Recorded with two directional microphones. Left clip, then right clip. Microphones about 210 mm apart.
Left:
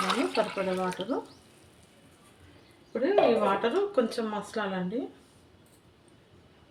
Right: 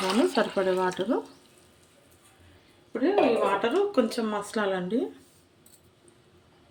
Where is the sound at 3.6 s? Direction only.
40° right (ahead or behind).